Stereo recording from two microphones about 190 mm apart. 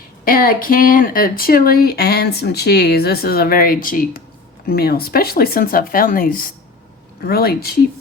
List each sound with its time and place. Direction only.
0.3 s speech: 50° left (ahead or behind)